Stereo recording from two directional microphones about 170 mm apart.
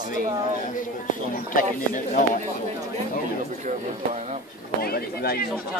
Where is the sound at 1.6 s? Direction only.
50° left (ahead or behind).